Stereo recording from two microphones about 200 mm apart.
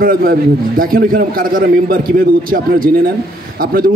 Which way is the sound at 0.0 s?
45° right (ahead or behind).